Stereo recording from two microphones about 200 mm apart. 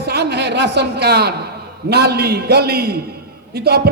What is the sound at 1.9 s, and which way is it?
A man's voice, 55° right (ahead or behind).